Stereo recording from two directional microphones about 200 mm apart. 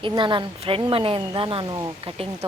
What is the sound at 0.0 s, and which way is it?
A woman's voice, 25° right (ahead or behind).